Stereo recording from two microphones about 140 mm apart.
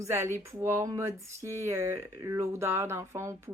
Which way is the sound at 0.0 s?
20° right (ahead or behind).